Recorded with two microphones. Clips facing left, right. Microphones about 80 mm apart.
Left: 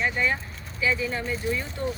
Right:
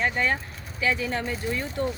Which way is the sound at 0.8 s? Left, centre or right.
Right.